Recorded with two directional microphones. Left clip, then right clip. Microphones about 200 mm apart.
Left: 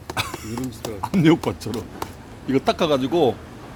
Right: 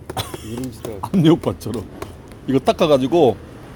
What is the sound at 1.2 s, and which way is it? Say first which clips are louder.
Speech: right 2 dB; 15° right (ahead or behind).